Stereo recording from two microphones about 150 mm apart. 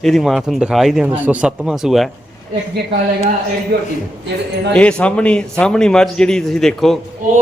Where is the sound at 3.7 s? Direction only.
90° right.